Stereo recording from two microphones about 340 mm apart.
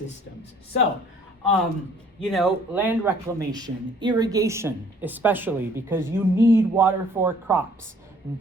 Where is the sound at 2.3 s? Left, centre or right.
Centre.